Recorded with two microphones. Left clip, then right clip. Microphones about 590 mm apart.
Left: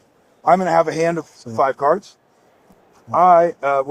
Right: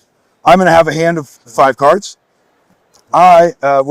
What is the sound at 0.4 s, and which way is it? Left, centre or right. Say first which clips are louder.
Speech: right 8 dB; right.